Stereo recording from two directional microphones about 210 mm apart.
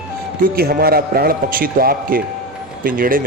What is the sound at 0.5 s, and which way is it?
Speech, 45° right (ahead or behind).